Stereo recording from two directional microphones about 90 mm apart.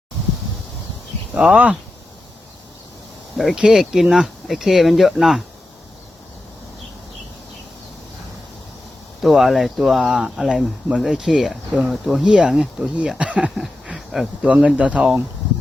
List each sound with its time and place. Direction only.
1.3 s speech: 5° right (ahead or behind)
3.3 s speech: 5° right (ahead or behind)
9.2 s speech: centre (ahead or behind)